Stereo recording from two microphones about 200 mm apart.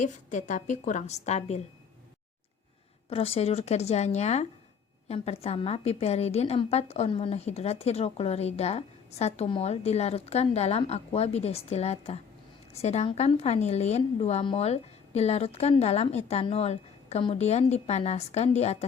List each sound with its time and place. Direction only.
0.0 s a woman's voice: 35° left (ahead or behind)
3.1 s a woman's voice: 30° left (ahead or behind)